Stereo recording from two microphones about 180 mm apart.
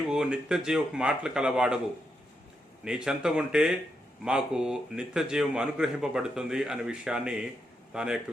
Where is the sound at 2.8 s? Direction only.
5° right (ahead or behind).